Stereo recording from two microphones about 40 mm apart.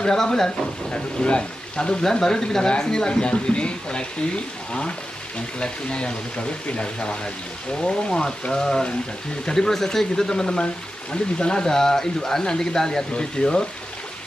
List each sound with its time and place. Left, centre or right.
0.0 s speech: centre
0.9 s speech: left
5.6 s speech: left
8.1 s speech: centre